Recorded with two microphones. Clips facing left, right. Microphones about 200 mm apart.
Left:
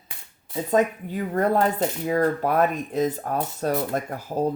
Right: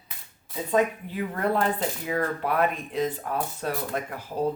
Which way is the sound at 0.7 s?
45° left (ahead or behind).